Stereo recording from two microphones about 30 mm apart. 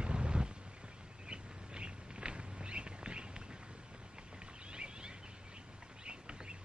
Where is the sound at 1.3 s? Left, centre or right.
Right.